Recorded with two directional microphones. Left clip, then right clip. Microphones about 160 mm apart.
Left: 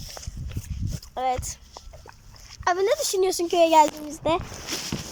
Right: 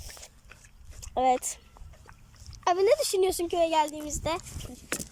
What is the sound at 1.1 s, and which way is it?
Speech, 20° right (ahead or behind).